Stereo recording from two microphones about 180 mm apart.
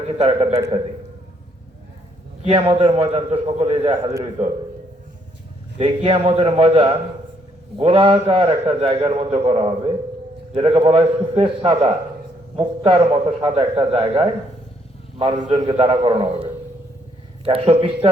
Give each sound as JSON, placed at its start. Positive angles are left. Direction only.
{"t": 0.2, "sound": "a man's voice", "side_deg": -40}
{"t": 2.4, "sound": "a man's voice", "side_deg": -35}
{"t": 5.8, "sound": "a man's voice", "side_deg": -30}